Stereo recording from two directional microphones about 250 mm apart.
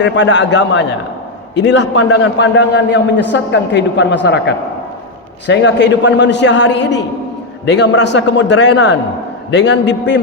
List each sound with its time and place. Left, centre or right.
0.0 s a man's voice: left